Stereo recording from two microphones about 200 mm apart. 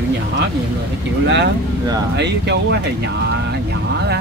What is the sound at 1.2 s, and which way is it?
Speech, 60° right (ahead or behind).